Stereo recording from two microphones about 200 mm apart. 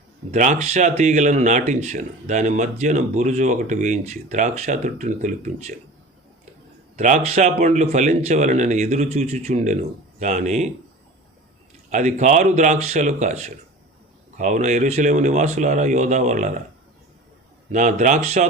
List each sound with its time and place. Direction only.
0.3 s speech: 35° right (ahead or behind)
6.9 s speech: 35° right (ahead or behind)
11.9 s speech: 35° right (ahead or behind)
17.7 s speech: 35° right (ahead or behind)